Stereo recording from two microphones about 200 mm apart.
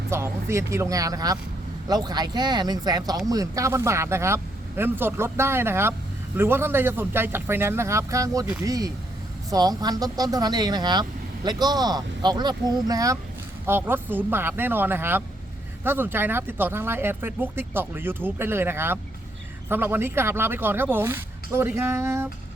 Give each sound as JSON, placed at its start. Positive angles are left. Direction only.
{"t": 0.1, "sound": "speech", "side_deg": -15}